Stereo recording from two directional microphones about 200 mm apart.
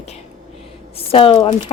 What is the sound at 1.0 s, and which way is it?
Speech, 30° left (ahead or behind).